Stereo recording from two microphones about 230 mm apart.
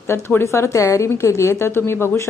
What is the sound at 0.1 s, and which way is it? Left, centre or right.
A woman's voice, centre.